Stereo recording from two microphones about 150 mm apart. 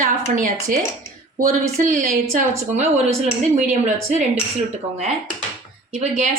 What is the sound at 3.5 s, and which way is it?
Speech, 50° right (ahead or behind).